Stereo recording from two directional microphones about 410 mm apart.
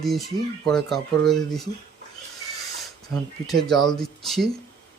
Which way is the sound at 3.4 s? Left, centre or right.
Centre.